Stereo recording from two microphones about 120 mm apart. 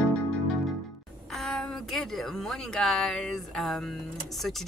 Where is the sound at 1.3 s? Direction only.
5° left (ahead or behind).